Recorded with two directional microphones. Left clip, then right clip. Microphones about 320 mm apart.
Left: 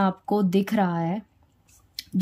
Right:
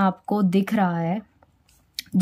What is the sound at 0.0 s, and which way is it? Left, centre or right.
Speech, centre.